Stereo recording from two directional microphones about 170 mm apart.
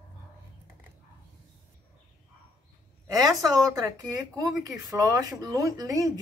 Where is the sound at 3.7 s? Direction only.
20° right (ahead or behind).